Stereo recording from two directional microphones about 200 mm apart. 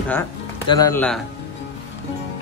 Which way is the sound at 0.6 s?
20° left (ahead or behind).